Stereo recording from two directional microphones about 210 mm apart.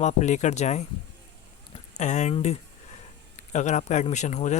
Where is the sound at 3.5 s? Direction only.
35° left (ahead or behind).